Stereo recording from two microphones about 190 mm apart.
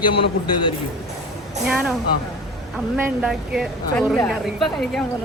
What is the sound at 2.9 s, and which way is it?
Speech, 5° right (ahead or behind).